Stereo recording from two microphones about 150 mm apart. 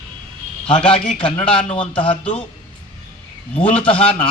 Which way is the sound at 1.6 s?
35° left (ahead or behind).